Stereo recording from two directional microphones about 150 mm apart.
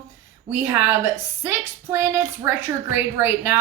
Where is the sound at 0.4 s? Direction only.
15° right (ahead or behind).